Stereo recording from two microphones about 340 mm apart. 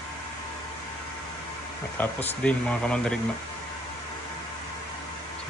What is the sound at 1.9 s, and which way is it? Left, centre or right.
Speech, centre.